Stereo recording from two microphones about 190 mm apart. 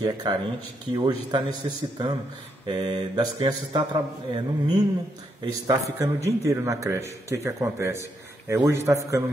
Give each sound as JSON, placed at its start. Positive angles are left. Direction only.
{"t": 0.0, "sound": "mantra", "side_deg": -20}
{"t": 5.4, "sound": "a man's voice", "side_deg": -20}